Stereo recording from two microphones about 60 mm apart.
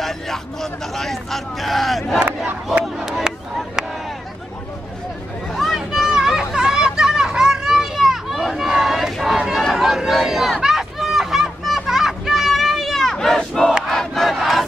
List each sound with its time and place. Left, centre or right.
0.0 s speech: centre
2.1 s crowd: right
2.8 s a sound: centre
5.5 s vehicle: centre
5.8 s children playing: centre
9.1 s a sound: centre
13.8 s crowd: centre